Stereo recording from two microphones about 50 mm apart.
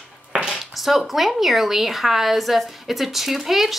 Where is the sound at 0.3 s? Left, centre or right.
Centre.